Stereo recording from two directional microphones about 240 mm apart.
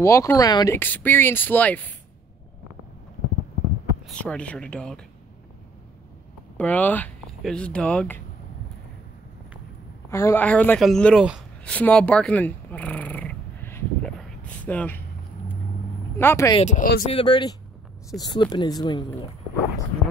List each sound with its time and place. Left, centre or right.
0.0 s speech: centre
4.1 s speech: centre
6.5 s speech: centre
10.0 s a woman's voice: centre
16.2 s speech: centre
16.6 s speech: left
17.1 s speech: centre